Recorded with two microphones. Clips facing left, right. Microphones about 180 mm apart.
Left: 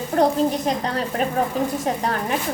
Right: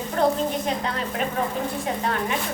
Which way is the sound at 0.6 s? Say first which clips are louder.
Left 3 dB; 40° left (ahead or behind).